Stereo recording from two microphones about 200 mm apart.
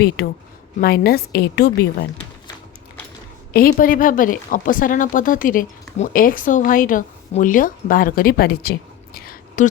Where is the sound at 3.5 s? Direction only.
45° left (ahead or behind).